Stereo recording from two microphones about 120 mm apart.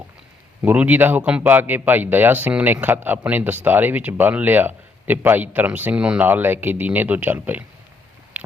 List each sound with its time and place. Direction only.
0.6 s speech: 15° right (ahead or behind)